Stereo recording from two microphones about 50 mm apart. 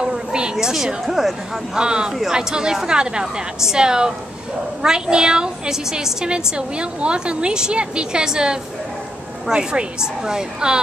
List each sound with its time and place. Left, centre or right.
0.0 s a sound: centre
1.0 s speech: centre
1.8 s a woman's voice: centre